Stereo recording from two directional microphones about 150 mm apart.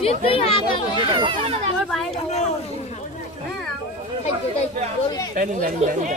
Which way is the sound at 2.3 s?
45° left (ahead or behind).